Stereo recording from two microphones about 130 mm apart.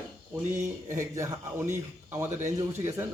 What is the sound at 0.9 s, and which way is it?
A man's voice, 20° right (ahead or behind).